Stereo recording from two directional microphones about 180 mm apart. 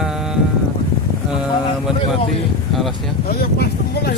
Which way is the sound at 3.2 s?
60° left (ahead or behind).